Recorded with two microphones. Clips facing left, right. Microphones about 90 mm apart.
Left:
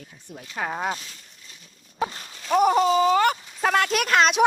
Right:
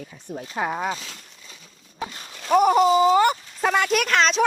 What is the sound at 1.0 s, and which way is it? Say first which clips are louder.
Speech: right 4 dB; 90° right.